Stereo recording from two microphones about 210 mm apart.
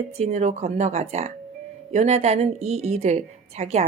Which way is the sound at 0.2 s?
30° right (ahead or behind).